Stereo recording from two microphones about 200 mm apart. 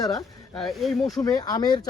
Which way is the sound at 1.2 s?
20° left (ahead or behind).